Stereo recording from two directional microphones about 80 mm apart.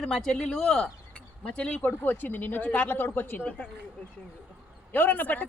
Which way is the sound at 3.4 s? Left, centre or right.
Centre.